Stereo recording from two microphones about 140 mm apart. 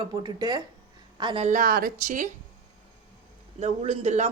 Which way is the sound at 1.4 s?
80° right.